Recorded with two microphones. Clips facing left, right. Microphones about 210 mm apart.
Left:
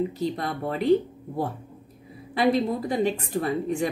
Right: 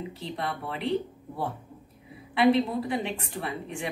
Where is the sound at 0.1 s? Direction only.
40° left (ahead or behind).